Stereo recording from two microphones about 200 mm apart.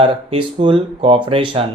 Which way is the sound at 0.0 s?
25° right (ahead or behind).